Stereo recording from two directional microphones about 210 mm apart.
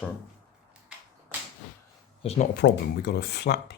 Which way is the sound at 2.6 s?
50° left (ahead or behind).